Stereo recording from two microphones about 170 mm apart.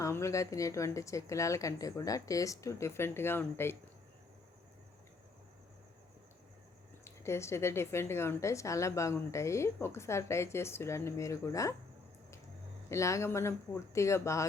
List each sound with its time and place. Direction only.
0.0 s a woman's voice: 15° left (ahead or behind)
7.0 s a woman's voice: 15° left (ahead or behind)
12.9 s a woman's voice: 15° left (ahead or behind)